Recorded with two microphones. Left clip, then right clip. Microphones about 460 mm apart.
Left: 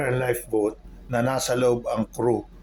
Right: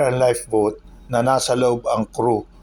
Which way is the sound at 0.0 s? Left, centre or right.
Left.